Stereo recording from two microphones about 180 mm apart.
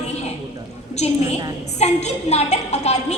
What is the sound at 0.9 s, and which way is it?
A woman's voice, 40° left (ahead or behind).